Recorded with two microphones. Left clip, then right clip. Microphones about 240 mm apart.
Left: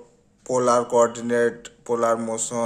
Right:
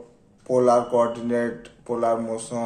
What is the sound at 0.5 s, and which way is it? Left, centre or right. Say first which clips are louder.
Speech: right 1 dB; left.